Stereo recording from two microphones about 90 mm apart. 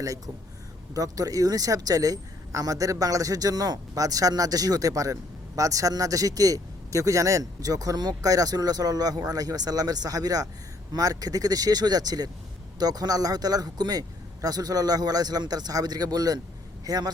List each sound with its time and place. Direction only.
0.9 s speech: 40° right (ahead or behind)